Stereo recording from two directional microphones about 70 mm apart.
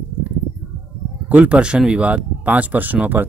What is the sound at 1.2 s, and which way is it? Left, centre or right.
Speech, centre.